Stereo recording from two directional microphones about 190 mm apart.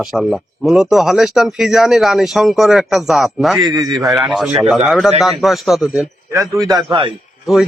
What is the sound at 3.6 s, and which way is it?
Speech, 20° right (ahead or behind).